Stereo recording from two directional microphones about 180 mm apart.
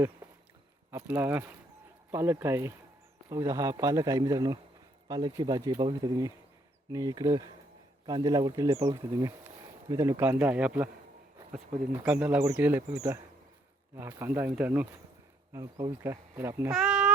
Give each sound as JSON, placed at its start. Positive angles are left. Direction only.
{"t": 0.9, "sound": "speech", "side_deg": -10}
{"t": 12.0, "sound": "speech", "side_deg": -5}
{"t": 16.7, "sound": "a sound", "side_deg": 0}